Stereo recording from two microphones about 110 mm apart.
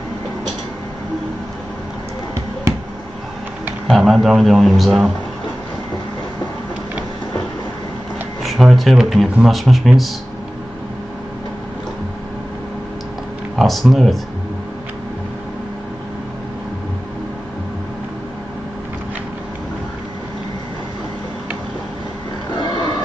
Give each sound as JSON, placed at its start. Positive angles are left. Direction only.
{"t": 4.0, "sound": "speech", "side_deg": 0}
{"t": 8.5, "sound": "speech", "side_deg": 0}
{"t": 13.6, "sound": "speech", "side_deg": 0}
{"t": 22.6, "sound": "a sound", "side_deg": 40}